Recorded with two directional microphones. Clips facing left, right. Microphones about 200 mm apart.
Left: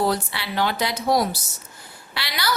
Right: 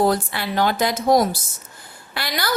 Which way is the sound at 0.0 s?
50° right (ahead or behind).